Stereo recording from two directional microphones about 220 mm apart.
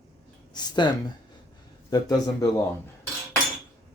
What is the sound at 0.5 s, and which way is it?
Speech, 20° left (ahead or behind).